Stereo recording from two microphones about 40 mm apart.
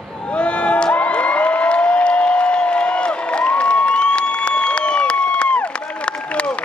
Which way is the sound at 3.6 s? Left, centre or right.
Left.